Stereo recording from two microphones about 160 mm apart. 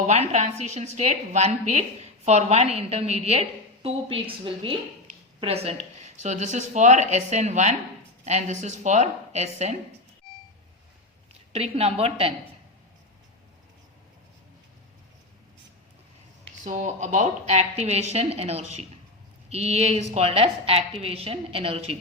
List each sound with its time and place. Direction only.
0.1 s a woman's voice: 45° right (ahead or behind)
11.5 s a woman's voice: 40° right (ahead or behind)
16.6 s a woman's voice: 50° right (ahead or behind)